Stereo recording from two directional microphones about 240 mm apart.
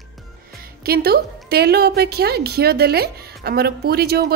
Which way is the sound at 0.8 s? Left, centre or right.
Right.